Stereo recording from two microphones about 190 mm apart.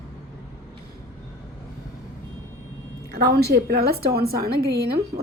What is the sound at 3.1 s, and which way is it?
A woman's voice, 55° right (ahead or behind).